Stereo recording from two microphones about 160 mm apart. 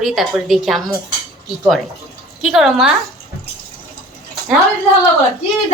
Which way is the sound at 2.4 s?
Centre (ahead or behind).